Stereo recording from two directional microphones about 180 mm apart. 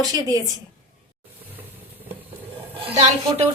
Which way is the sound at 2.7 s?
30° right (ahead or behind).